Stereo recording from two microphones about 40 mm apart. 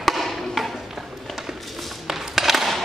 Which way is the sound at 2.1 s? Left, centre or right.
Centre.